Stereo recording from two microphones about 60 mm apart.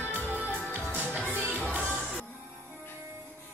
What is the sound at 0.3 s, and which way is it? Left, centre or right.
Music, right.